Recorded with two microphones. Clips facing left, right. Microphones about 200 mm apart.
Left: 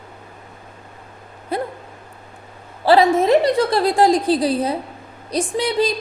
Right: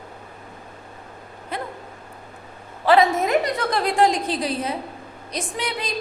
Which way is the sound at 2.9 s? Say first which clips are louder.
Left 4 dB; 30° left (ahead or behind).